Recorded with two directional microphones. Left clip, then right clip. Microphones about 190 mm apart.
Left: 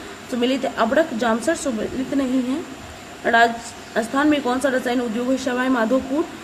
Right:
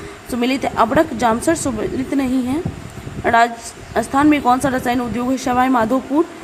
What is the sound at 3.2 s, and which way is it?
A woman's voice, 25° right (ahead or behind).